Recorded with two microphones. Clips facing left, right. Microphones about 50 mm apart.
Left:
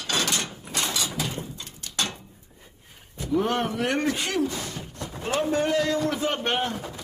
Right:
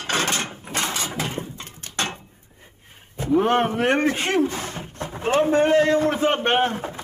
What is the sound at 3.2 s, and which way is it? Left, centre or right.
Speech, right.